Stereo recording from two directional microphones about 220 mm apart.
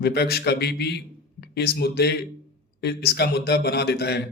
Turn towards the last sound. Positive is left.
turn(degrees=50)  # may be behind; listen again after turning